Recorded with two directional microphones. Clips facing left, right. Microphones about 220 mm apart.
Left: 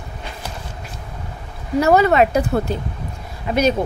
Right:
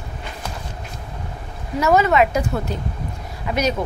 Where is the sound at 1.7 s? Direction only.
35° left (ahead or behind).